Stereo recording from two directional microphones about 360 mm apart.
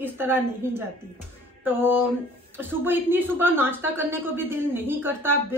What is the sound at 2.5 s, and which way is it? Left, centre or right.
A woman's voice, centre.